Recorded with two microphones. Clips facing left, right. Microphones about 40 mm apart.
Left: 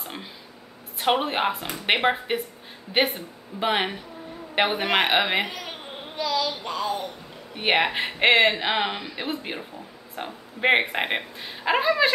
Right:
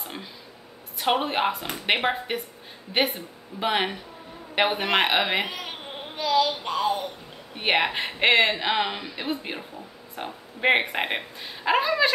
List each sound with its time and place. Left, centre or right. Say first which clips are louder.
0.9 s a woman's voice: left 1 dB; centre
6.4 s a sound: right 3 dB; centre
7.5 s speech: left 1 dB; centre